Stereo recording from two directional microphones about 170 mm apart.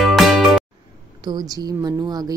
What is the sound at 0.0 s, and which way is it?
Music, centre (ahead or behind).